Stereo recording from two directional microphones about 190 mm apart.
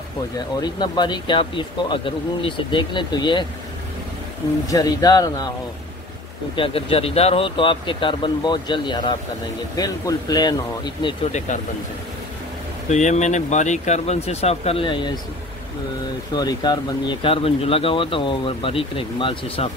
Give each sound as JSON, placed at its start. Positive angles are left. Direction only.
{"t": 0.6, "sound": "speech", "side_deg": 20}
{"t": 4.6, "sound": "speech", "side_deg": 20}
{"t": 6.5, "sound": "speech", "side_deg": 30}
{"t": 11.3, "sound": "speech", "side_deg": 40}
{"t": 12.9, "sound": "speech", "side_deg": 40}
{"t": 16.3, "sound": "speech", "side_deg": 20}